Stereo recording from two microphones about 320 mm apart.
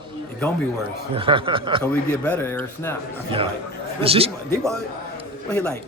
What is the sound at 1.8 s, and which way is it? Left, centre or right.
Speech, centre.